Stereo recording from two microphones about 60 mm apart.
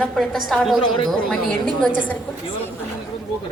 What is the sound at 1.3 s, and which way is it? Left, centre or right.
Speech, centre.